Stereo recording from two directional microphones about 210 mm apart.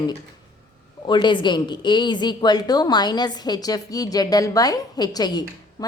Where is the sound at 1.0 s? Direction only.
20° left (ahead or behind).